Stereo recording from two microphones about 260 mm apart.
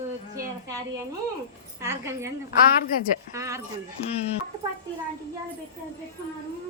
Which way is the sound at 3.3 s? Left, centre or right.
Centre.